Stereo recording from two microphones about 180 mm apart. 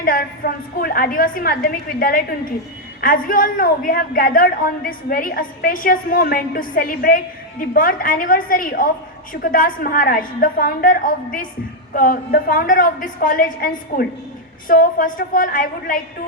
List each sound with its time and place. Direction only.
0.0 s a woman's voice: 50° left (ahead or behind)